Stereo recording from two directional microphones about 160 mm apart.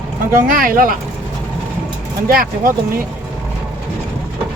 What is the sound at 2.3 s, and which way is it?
Speech, 65° right (ahead or behind).